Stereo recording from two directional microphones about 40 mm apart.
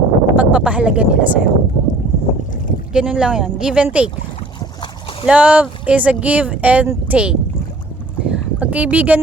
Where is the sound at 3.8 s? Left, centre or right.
Right.